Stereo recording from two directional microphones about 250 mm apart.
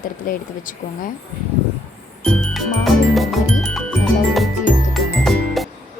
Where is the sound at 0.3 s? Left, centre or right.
Left.